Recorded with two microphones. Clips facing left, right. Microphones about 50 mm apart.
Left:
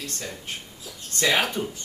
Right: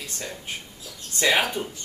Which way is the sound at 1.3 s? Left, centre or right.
Centre.